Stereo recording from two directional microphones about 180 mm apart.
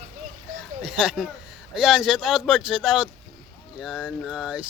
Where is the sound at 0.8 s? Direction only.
5° right (ahead or behind).